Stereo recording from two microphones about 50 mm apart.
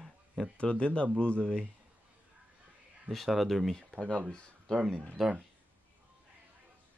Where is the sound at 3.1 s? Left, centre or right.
Centre.